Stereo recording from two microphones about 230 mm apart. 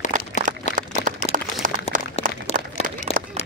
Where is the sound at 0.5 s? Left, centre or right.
Right.